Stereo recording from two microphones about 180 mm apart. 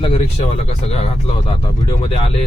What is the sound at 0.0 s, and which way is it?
Speech, 35° left (ahead or behind).